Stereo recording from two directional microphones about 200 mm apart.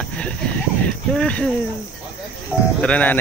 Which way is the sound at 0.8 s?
5° left (ahead or behind).